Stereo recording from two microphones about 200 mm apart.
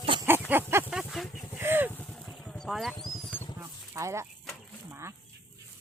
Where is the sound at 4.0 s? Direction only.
15° right (ahead or behind).